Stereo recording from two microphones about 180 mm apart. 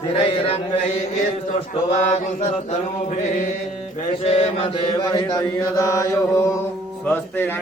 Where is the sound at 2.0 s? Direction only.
40° left (ahead or behind).